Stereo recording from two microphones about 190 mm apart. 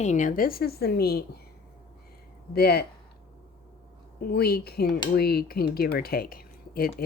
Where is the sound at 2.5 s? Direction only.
55° left (ahead or behind).